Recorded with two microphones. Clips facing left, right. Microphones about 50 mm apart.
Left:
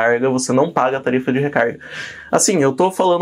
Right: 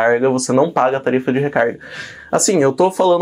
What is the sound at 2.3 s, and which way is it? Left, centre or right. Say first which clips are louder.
Speech: right 1 dB; left.